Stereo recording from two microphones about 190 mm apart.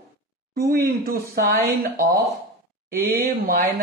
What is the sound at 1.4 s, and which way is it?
Speech, 15° right (ahead or behind).